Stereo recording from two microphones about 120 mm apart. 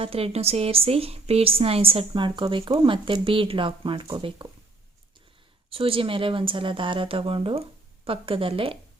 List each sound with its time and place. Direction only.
0.0 s a woman's voice: 55° right (ahead or behind)
5.7 s a woman's voice: 50° right (ahead or behind)